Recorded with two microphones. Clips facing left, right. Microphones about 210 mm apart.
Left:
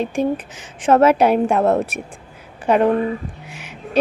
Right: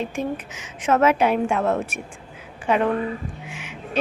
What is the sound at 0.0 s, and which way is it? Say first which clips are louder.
A woman's voice: left 6 dB; 35° left (ahead or behind).